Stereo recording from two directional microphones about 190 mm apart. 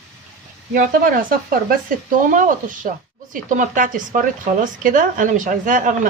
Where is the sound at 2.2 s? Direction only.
45° right (ahead or behind).